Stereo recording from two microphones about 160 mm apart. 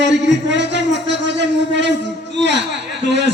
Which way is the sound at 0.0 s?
90° right.